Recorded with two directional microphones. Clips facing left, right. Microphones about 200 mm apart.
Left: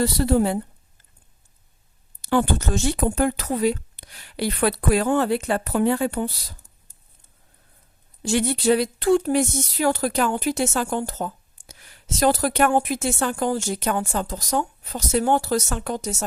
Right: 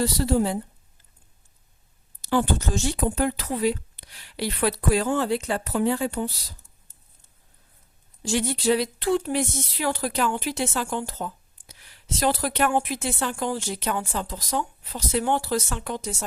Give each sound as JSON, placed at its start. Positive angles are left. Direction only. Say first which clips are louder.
{"t": 0.0, "sound": "speech", "louder": "left 3 dB", "side_deg": 60}
{"t": 2.2, "sound": "speech", "louder": "left 2 dB", "side_deg": 60}
{"t": 8.2, "sound": "speech", "louder": "left 3 dB", "side_deg": 60}